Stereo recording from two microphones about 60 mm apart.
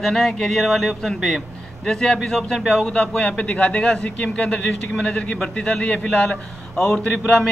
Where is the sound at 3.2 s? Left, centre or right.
Centre.